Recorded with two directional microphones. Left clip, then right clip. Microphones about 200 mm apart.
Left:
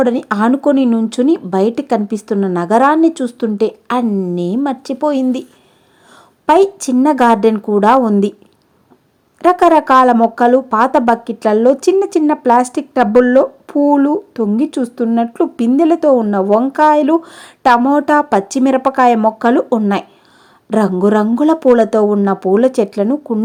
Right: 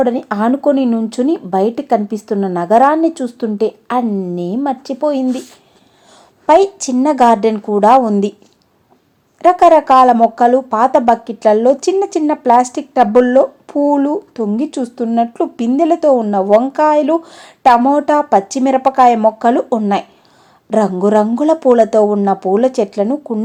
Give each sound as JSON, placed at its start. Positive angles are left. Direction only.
{"t": 0.0, "sound": "speech", "side_deg": 30}
{"t": 6.4, "sound": "speech", "side_deg": 35}
{"t": 9.4, "sound": "speech", "side_deg": 35}